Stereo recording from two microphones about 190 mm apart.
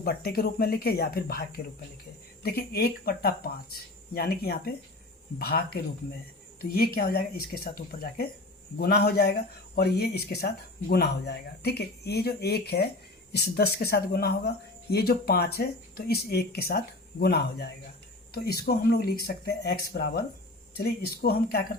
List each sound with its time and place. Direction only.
0.0 s speech: 55° left (ahead or behind)